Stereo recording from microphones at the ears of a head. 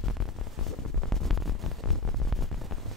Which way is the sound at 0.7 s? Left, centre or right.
Centre.